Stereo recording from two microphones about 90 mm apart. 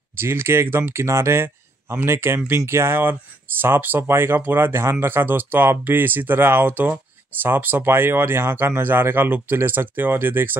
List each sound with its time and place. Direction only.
0.1 s speech: 25° right (ahead or behind)